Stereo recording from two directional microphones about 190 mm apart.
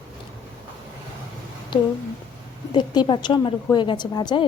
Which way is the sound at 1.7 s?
25° left (ahead or behind).